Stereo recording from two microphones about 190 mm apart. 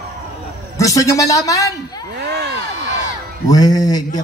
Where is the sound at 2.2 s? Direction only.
60° right (ahead or behind).